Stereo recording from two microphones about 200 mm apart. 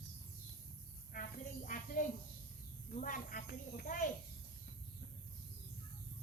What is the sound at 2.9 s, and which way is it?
Snake, 40° left (ahead or behind).